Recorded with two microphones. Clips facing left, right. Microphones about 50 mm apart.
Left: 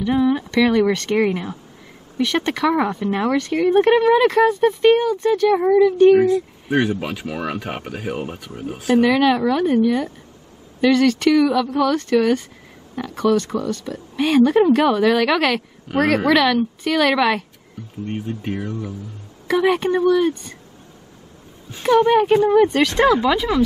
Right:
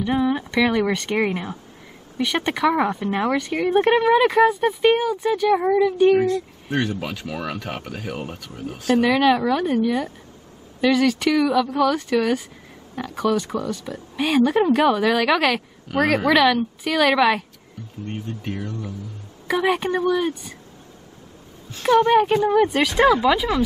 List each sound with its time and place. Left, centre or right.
0.0 s speech: centre
6.2 s speech: centre
8.9 s speech: centre
9.8 s speech: centre
18.0 s speech: left
19.4 s speech: centre
21.8 s speech: centre